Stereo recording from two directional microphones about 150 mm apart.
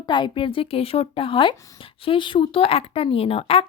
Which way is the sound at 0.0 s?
30° left (ahead or behind).